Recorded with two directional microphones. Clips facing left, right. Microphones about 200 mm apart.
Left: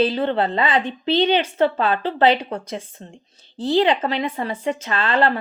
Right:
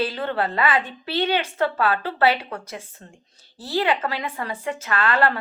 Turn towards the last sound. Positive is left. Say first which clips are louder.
# left 2 dB
turn(degrees=25)  # may be behind; listen again after turning